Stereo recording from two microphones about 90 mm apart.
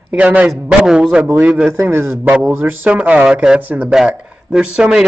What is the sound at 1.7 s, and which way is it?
Speech, 25° right (ahead or behind).